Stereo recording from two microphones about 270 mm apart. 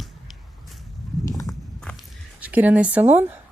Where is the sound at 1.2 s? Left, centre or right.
Centre.